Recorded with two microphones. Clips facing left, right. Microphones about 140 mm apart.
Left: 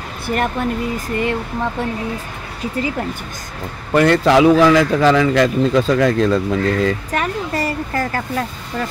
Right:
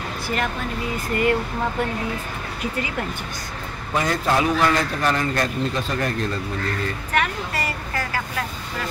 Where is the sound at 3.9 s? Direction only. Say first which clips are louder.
Left 9 dB; 70° left (ahead or behind); by 6.9 s 90° left.